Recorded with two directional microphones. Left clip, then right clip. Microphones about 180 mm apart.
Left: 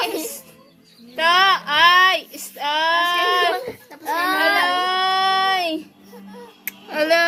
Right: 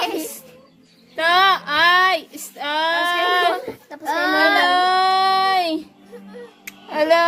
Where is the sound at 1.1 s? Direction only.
20° right (ahead or behind).